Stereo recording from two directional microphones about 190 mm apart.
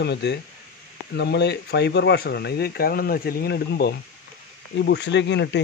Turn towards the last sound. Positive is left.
turn(degrees=65)  # may be behind; listen again after turning